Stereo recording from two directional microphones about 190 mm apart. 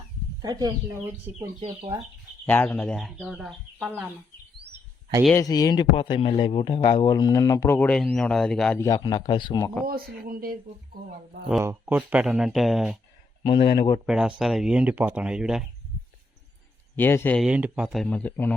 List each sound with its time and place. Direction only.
0.4 s speech: 20° right (ahead or behind)
2.5 s speech: 10° left (ahead or behind)
5.3 s speech: 15° left (ahead or behind)
8.8 s speech: 20° left (ahead or behind)
9.6 s speech: 10° left (ahead or behind)
9.8 s speech: 50° right (ahead or behind)
11.6 s speech: 10° right (ahead or behind)
13.4 s speech: 25° left (ahead or behind)
14.1 s speech: 5° right (ahead or behind)
17.0 s speech: 10° left (ahead or behind)
17.4 s speech: 5° right (ahead or behind)